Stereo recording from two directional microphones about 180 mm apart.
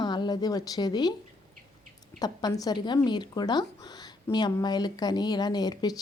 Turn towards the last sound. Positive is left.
turn(degrees=20)  # may be behind; listen again after turning